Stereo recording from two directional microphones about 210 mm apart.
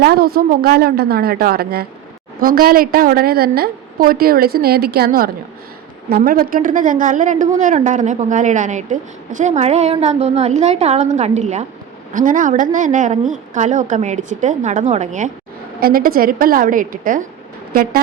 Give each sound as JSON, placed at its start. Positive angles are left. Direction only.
{"t": 0.0, "sound": "a woman's voice", "side_deg": -45}